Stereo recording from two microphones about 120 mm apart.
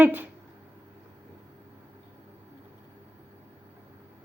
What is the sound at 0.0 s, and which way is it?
Speech, 15° right (ahead or behind).